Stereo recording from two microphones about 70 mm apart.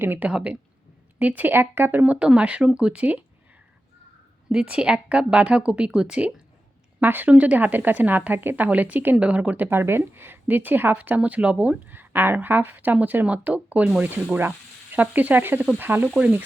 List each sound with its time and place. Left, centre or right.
0.0 s a woman's voice: right
0.3 s speech: centre
4.4 s speech: centre
7.0 s speech: right
9.6 s speech: right
11.9 s speech: right
14.9 s speech: right
16.0 s speech: centre